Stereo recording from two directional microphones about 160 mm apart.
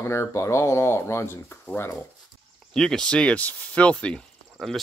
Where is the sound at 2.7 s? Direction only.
5° left (ahead or behind).